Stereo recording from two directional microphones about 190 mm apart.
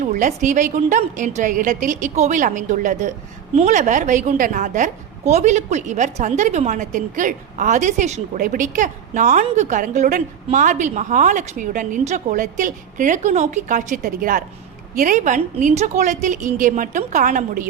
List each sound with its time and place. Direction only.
0.0 s a woman's voice: 40° right (ahead or behind)